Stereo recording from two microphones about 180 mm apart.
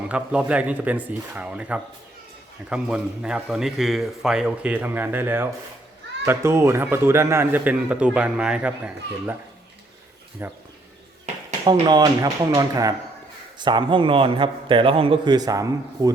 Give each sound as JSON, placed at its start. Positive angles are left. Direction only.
{"t": 0.1, "sound": "a man's voice", "side_deg": -5}
{"t": 10.4, "sound": "speech", "side_deg": -15}
{"t": 11.6, "sound": "a man's voice", "side_deg": -25}